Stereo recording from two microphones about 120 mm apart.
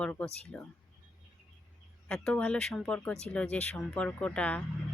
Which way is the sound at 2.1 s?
10° left (ahead or behind).